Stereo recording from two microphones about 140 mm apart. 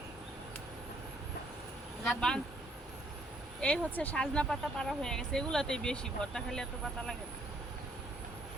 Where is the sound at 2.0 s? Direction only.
5° left (ahead or behind).